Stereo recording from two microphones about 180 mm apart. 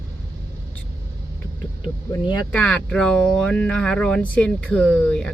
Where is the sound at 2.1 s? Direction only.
20° left (ahead or behind).